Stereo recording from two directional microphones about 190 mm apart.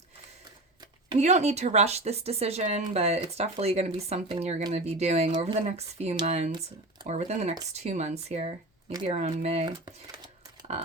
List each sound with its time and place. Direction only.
1.2 s speech: 35° right (ahead or behind)